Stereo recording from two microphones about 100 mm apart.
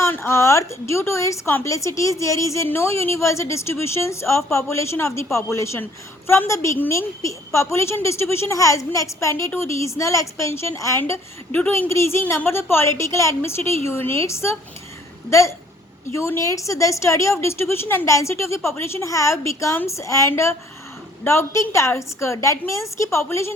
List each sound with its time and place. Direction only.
0.0 s a woman's voice: 25° left (ahead or behind)